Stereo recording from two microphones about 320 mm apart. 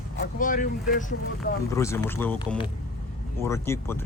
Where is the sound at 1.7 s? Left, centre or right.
Centre.